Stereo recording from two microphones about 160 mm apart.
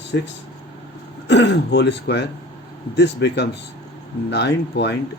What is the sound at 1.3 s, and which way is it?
Speech, 90° left.